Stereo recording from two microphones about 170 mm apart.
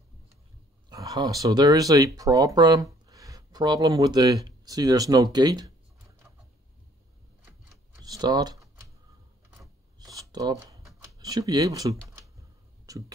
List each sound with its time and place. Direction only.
0.8 s speech: 20° right (ahead or behind)
8.0 s typing: 25° right (ahead or behind)
9.9 s shuffling cards: 20° right (ahead or behind)